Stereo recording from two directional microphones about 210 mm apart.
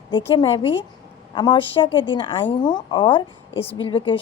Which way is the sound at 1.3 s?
20° left (ahead or behind).